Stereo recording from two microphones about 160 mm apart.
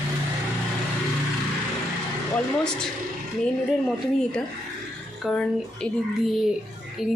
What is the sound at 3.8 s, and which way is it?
A woman's voice, 5° left (ahead or behind).